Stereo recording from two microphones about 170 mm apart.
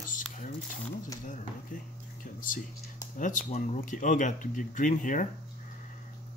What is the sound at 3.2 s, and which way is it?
Speech, 50° left (ahead or behind).